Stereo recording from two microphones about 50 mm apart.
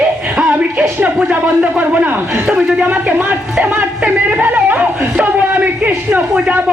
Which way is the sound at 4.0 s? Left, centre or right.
Right.